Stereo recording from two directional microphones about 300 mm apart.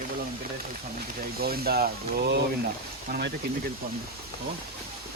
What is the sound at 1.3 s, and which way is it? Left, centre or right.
Speech, right.